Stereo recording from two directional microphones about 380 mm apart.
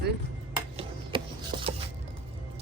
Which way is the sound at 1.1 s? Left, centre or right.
Centre.